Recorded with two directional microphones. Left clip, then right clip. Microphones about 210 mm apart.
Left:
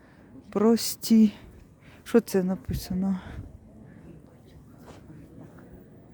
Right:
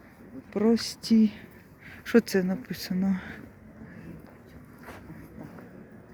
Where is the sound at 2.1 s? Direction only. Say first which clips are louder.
Even; 20° left (ahead or behind).